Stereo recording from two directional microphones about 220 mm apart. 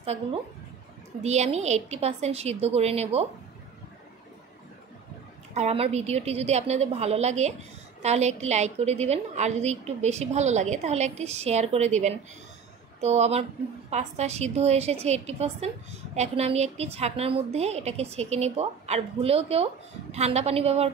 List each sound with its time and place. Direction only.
0.0 s a woman's voice: 30° right (ahead or behind)
5.5 s a woman's voice: 30° right (ahead or behind)